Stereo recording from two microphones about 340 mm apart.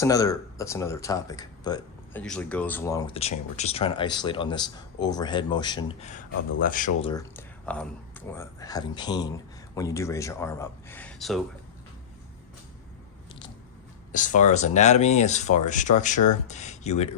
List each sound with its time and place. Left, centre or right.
0.0 s speech: centre
14.1 s speech: left